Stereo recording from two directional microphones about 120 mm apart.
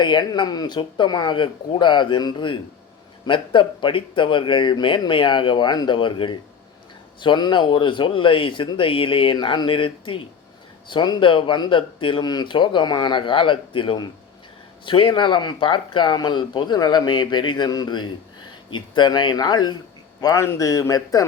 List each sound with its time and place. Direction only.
0.0 s speech: 40° left (ahead or behind)
20.2 s a man's voice: 25° left (ahead or behind)